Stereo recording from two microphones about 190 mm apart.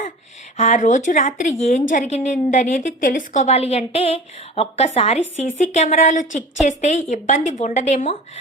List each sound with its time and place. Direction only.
0.5 s a woman's voice: 40° left (ahead or behind)